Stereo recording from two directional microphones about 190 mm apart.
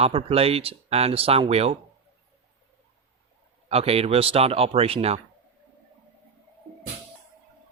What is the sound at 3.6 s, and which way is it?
Speech, 30° right (ahead or behind).